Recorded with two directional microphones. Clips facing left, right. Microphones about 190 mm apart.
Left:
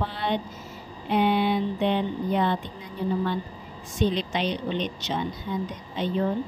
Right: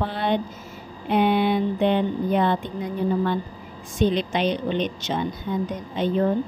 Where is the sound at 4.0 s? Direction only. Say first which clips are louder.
Right 4 dB; 55° right (ahead or behind).